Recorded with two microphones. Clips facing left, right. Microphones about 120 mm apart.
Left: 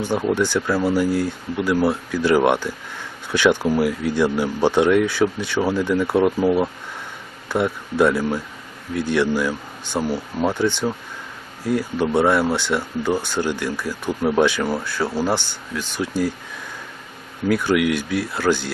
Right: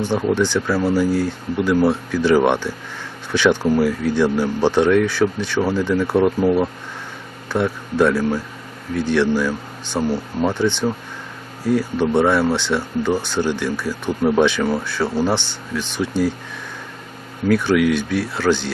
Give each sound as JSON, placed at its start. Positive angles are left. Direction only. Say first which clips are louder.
{"t": 0.2, "sound": "speech", "louder": "right 2 dB", "side_deg": 0}
{"t": 17.5, "sound": "speech", "louder": "right 3 dB", "side_deg": 5}